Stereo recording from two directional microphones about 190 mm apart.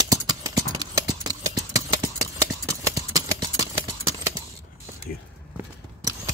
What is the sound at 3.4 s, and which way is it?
Clip-clop, 20° right (ahead or behind).